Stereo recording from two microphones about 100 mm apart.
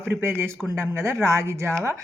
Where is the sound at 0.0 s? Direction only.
20° right (ahead or behind).